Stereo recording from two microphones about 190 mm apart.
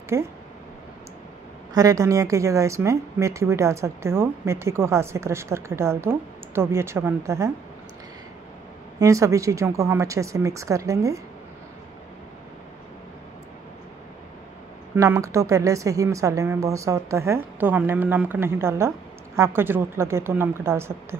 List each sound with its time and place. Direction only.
0.1 s speech: 15° right (ahead or behind)
1.7 s speech: 20° right (ahead or behind)
9.0 s speech: 15° right (ahead or behind)
15.0 s speech: 15° right (ahead or behind)